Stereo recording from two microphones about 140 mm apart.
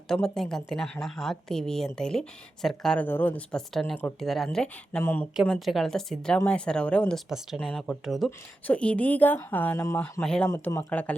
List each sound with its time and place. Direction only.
0.1 s speech: 5° left (ahead or behind)
5.4 s speech: centre (ahead or behind)
7.3 s speech: 5° right (ahead or behind)
10.5 s speech: 20° left (ahead or behind)